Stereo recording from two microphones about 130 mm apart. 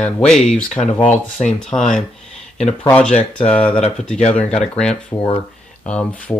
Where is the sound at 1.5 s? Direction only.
5° left (ahead or behind).